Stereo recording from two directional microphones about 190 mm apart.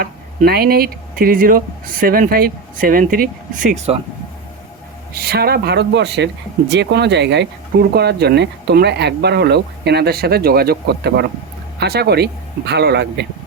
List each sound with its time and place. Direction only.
0.4 s speech: 55° right (ahead or behind)
5.1 s speech: 55° right (ahead or behind)